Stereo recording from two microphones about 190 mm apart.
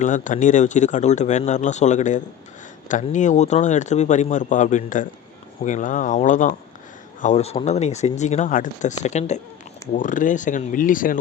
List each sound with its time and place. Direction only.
0.0 s speech: 40° left (ahead or behind)